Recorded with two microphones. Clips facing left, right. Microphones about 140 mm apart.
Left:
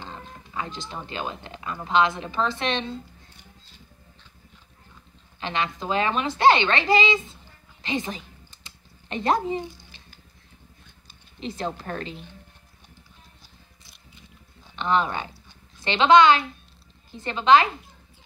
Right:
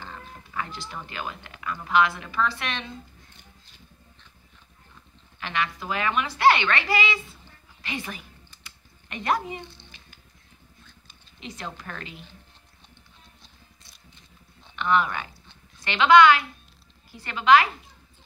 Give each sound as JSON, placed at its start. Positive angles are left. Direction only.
{"t": 0.0, "sound": "speech", "side_deg": 20}
{"t": 5.4, "sound": "a woman's voice", "side_deg": 25}
{"t": 7.8, "sound": "typing", "side_deg": 25}
{"t": 11.1, "sound": "speech", "side_deg": 30}
{"t": 14.8, "sound": "a woman's voice", "side_deg": 25}